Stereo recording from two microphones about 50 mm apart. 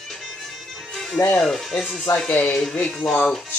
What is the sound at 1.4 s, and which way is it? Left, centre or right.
Speech, centre.